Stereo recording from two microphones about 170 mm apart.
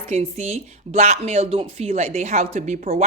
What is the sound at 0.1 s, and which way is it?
Speech, 40° right (ahead or behind).